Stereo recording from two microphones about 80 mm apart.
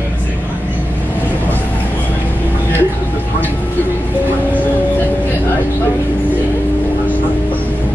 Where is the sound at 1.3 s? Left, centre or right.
Left.